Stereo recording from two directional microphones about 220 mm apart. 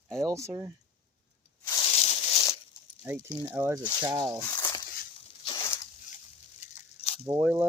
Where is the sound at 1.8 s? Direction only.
30° left (ahead or behind).